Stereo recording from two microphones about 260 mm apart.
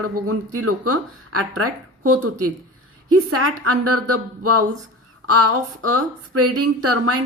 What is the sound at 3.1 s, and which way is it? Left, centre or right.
Speech, right.